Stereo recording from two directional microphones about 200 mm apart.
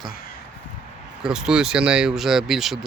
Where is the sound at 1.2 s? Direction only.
5° right (ahead or behind).